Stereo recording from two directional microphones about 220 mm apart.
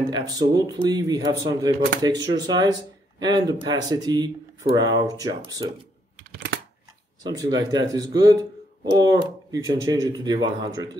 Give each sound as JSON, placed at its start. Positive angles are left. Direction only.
{"t": 0.1, "sound": "speech", "side_deg": -20}
{"t": 7.2, "sound": "speech", "side_deg": -20}